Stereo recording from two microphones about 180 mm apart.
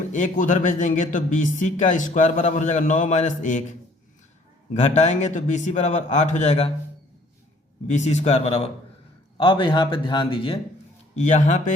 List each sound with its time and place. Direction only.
0.1 s speech: 45° left (ahead or behind)
4.7 s a man's voice: 40° left (ahead or behind)
7.9 s a man's voice: 40° left (ahead or behind)
11.1 s a man's voice: 40° left (ahead or behind)